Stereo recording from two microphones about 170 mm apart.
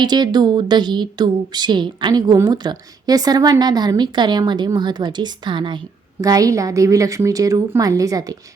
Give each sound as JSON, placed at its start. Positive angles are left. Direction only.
{"t": 0.0, "sound": "speech", "side_deg": -25}